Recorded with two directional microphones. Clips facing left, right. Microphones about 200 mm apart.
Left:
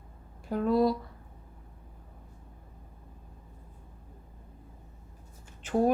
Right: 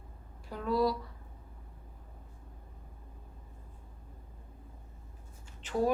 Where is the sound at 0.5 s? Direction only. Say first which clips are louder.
Left 5 dB; 50° left (ahead or behind).